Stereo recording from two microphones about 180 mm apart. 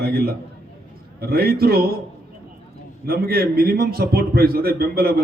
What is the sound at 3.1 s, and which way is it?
A man's voice, 60° right (ahead or behind).